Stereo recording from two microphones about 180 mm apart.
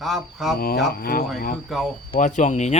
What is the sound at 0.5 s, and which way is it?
Speech, 55° left (ahead or behind).